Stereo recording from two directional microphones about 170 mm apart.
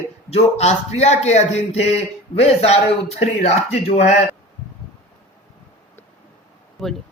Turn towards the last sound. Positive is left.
turn(degrees=0)  # may be behind; listen again after turning